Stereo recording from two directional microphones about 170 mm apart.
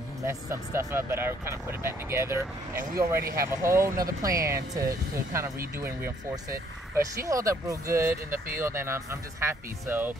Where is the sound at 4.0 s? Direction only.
20° right (ahead or behind).